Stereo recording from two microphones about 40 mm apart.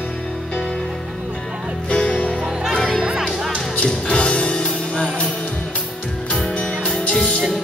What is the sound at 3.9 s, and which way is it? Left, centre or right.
Music, left.